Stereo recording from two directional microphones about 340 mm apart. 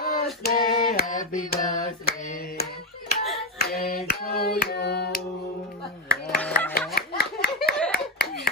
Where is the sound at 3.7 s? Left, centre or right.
Left.